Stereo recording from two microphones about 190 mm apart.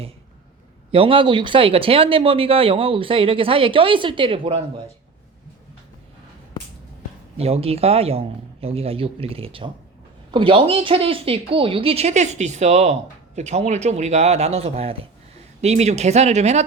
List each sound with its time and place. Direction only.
0.9 s speech: 30° right (ahead or behind)
7.3 s speech: 30° right (ahead or behind)